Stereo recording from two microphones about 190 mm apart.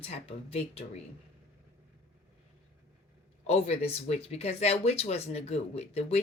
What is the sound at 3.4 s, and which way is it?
A woman's voice, 35° left (ahead or behind).